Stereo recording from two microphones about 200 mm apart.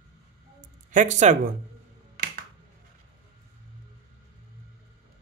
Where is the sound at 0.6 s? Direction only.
40° right (ahead or behind).